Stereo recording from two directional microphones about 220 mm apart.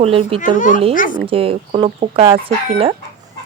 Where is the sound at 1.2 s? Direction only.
25° right (ahead or behind).